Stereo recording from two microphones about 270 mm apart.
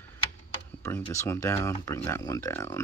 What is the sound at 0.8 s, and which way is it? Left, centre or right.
Speech, centre.